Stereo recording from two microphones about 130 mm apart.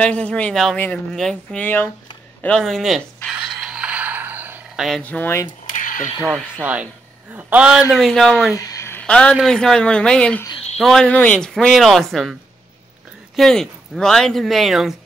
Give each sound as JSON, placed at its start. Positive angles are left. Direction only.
{"t": 0.0, "sound": "speech", "side_deg": 10}
{"t": 2.4, "sound": "speech", "side_deg": 5}
{"t": 3.3, "sound": "a sound", "side_deg": -5}
{"t": 4.7, "sound": "speech", "side_deg": 0}
{"t": 5.0, "sound": "speech", "side_deg": 15}
{"t": 5.7, "sound": "a sound", "side_deg": 90}
{"t": 6.1, "sound": "a man's voice", "side_deg": -5}
{"t": 8.5, "sound": "a sound", "side_deg": 25}
{"t": 9.3, "sound": "speech", "side_deg": 0}
{"t": 13.4, "sound": "speech", "side_deg": 5}